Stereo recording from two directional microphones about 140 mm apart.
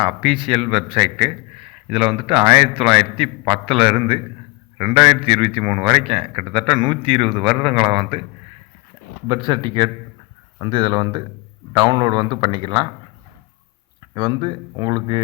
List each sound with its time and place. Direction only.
0.2 s a man's voice: 40° right (ahead or behind)
9.2 s a man's voice: 30° right (ahead or behind)
14.1 s a man's voice: 35° right (ahead or behind)